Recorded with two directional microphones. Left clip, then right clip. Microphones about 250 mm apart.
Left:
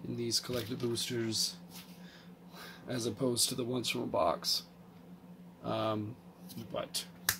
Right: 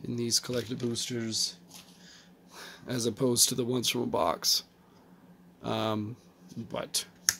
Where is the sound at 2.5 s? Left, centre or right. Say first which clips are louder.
Right 4 dB; right.